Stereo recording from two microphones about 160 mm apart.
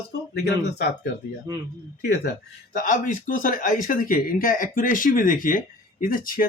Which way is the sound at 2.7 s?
60° left (ahead or behind).